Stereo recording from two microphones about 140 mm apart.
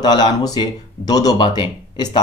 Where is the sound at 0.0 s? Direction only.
30° left (ahead or behind).